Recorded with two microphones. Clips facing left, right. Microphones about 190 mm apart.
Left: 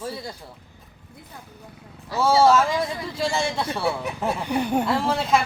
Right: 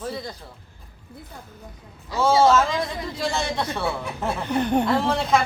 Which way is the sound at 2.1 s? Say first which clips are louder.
Even; 15° right (ahead or behind).